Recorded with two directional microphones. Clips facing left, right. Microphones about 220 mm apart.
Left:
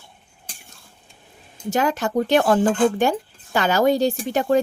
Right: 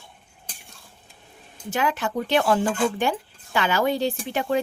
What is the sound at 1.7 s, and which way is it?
Speech, 40° left (ahead or behind).